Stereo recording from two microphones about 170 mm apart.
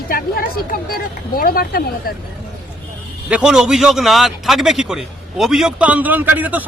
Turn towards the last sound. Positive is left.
turn(degrees=-10)  # may be behind; listen again after turning